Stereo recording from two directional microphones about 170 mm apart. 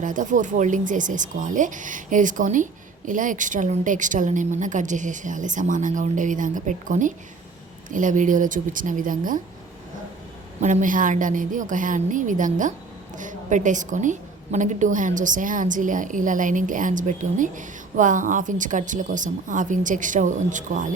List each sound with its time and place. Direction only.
0.0 s a woman's voice: 50° right (ahead or behind)
10.6 s a woman's voice: 50° right (ahead or behind)